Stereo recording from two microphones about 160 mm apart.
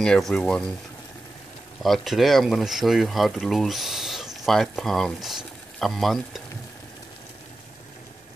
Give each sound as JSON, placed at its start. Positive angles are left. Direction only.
{"t": 0.0, "sound": "speech", "side_deg": 5}
{"t": 1.8, "sound": "speech", "side_deg": 0}